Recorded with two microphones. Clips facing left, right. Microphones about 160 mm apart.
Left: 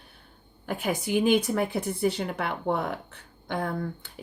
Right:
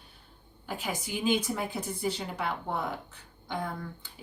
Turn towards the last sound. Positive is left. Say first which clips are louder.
# left 6 dB
turn(degrees=60)  # may be behind; listen again after turning